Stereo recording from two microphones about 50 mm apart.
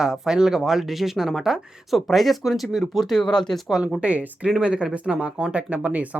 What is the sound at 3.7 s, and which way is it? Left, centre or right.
Speech, centre.